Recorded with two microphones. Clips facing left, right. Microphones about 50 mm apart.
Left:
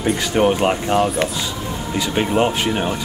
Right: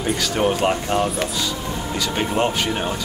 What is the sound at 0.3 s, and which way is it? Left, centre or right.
Speech, centre.